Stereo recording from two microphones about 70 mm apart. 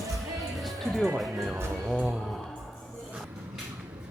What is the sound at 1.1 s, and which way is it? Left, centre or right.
Speech, centre.